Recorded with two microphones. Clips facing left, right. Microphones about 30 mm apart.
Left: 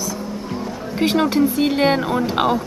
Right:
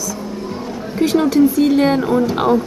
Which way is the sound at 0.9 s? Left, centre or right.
Left.